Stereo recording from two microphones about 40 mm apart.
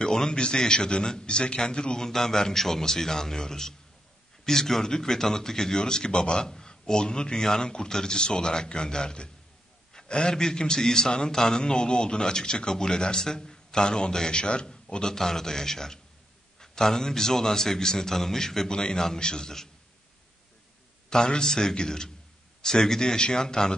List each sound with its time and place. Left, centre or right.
0.0 s a man's voice: centre
2.0 s a man's voice: centre
21.1 s a man's voice: centre